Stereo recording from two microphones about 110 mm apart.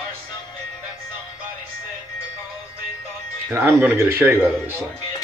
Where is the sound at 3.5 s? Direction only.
20° right (ahead or behind).